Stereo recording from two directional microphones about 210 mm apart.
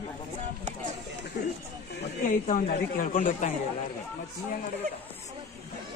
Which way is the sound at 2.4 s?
40° left (ahead or behind).